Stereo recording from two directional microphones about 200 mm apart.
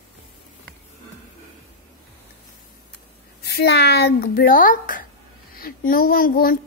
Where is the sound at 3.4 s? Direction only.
55° left (ahead or behind).